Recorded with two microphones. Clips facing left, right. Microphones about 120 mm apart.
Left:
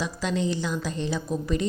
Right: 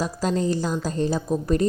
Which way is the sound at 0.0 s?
40° right (ahead or behind).